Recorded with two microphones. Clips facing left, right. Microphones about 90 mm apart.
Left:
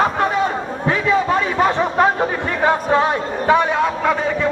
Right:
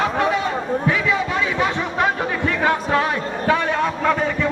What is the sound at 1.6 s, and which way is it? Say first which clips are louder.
Chatter: left 7 dB; 40° left (ahead or behind).